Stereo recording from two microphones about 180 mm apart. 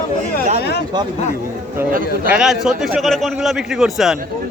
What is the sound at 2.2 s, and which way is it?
A man's voice, 5° right (ahead or behind).